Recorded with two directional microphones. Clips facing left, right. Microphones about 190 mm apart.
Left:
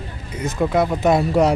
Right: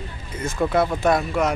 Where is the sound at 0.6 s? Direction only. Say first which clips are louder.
Left 2 dB; 10° left (ahead or behind).